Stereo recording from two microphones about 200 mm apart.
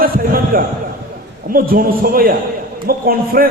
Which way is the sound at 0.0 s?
45° right (ahead or behind).